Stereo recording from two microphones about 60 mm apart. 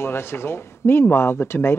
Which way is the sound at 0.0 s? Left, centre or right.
Left.